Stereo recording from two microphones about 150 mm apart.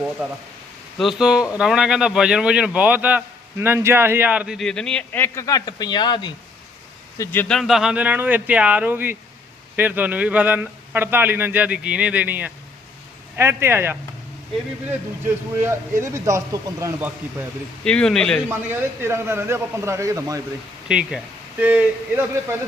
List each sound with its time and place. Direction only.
0.2 s a man's voice: 10° right (ahead or behind); by 6.3 s 30° left (ahead or behind)
7.2 s a man's voice: 15° left (ahead or behind); by 13.9 s 15° right (ahead or behind)
15.5 s speech: 15° right (ahead or behind)
17.8 s a man's voice: 5° left (ahead or behind)
18.4 s a man's voice: 15° right (ahead or behind)
20.8 s a man's voice: 5° right (ahead or behind)